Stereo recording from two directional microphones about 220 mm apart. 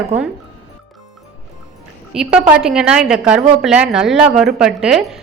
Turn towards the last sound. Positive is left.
turn(degrees=0)  # may be behind; listen again after turning